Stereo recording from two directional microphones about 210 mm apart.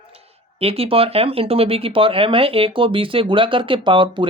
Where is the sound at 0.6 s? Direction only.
30° right (ahead or behind).